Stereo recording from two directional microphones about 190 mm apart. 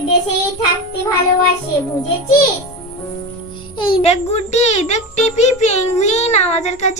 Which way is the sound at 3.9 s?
35° left (ahead or behind).